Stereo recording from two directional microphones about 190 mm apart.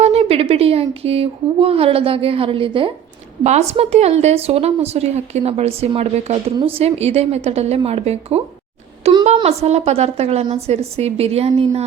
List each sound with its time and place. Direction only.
0.0 s a woman's voice: 35° right (ahead or behind)